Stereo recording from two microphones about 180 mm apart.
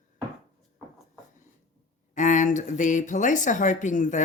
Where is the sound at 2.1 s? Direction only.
45° left (ahead or behind).